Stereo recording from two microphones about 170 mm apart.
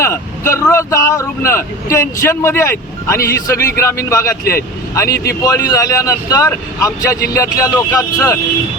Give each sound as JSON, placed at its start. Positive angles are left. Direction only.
{"t": 0.0, "sound": "speech", "side_deg": 15}
{"t": 5.0, "sound": "speech", "side_deg": 65}
{"t": 5.4, "sound": "speech", "side_deg": 20}